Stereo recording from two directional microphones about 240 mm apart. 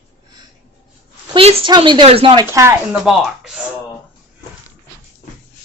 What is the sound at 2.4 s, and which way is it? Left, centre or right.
Speech, centre.